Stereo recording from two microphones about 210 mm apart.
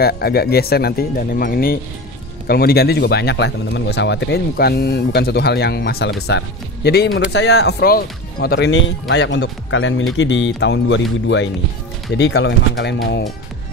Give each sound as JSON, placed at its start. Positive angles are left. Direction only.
{"t": 0.0, "sound": "speech", "side_deg": 50}